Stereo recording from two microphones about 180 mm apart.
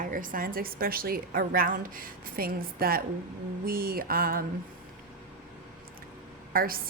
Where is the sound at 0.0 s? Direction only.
50° right (ahead or behind).